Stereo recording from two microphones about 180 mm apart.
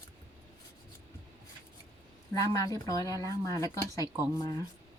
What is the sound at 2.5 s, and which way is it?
Speech, 20° left (ahead or behind).